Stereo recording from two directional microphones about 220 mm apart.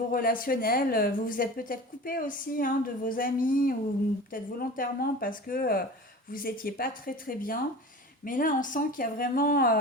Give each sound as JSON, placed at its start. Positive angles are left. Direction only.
{"t": 0.1, "sound": "a woman's voice", "side_deg": 40}